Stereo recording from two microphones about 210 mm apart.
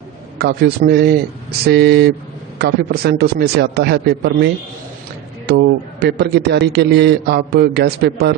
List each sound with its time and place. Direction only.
0.4 s a man's voice: 50° right (ahead or behind)
5.5 s a man's voice: 50° right (ahead or behind)